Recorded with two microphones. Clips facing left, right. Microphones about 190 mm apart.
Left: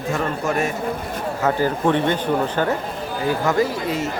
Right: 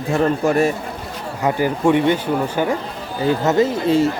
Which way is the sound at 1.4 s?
15° right (ahead or behind).